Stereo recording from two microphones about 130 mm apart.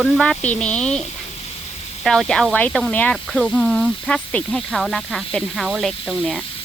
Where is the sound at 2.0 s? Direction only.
5° left (ahead or behind).